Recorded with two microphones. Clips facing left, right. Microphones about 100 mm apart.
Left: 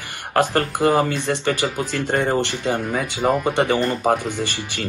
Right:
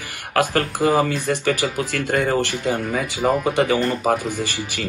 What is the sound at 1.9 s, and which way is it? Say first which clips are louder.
Speech: even; 20° left (ahead or behind).